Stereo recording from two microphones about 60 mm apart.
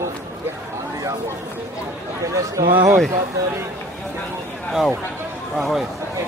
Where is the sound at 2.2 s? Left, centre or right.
Right.